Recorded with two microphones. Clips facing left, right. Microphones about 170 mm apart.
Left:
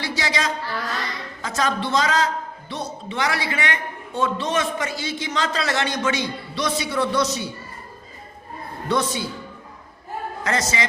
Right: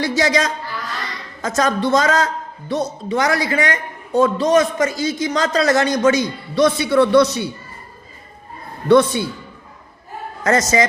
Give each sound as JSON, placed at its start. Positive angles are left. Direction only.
{"t": 0.0, "sound": "a man's voice", "side_deg": -45}
{"t": 8.9, "sound": "speech", "side_deg": -60}
{"t": 10.4, "sound": "a man's voice", "side_deg": -45}